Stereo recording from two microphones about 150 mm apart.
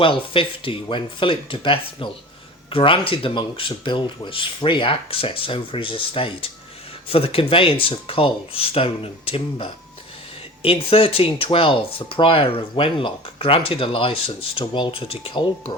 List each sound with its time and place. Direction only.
0.0 s speech: 35° left (ahead or behind)